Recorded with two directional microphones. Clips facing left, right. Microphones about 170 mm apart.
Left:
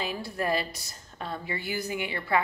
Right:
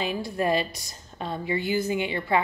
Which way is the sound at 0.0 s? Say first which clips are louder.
Right 4 dB; 20° right (ahead or behind).